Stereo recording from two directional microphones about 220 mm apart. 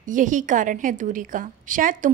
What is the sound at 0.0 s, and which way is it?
A woman's voice, 35° right (ahead or behind).